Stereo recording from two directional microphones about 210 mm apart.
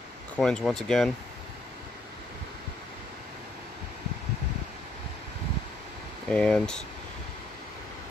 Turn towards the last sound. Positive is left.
turn(degrees=5)  # may be behind; listen again after turning